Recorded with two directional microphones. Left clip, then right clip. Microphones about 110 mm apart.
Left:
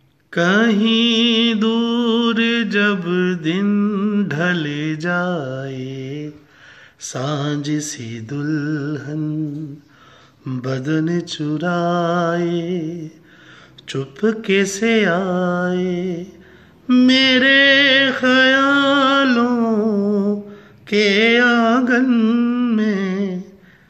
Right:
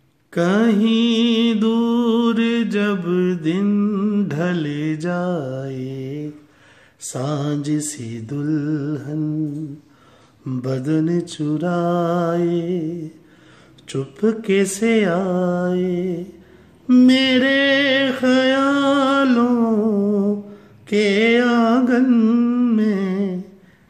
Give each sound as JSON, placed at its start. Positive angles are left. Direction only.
{"t": 0.3, "sound": "mantra", "side_deg": -30}
{"t": 3.6, "sound": "mantra", "side_deg": -15}
{"t": 7.0, "sound": "a sound", "side_deg": -30}
{"t": 10.4, "sound": "mantra", "side_deg": -25}
{"t": 16.8, "sound": "a sound", "side_deg": -30}
{"t": 20.0, "sound": "humming", "side_deg": -25}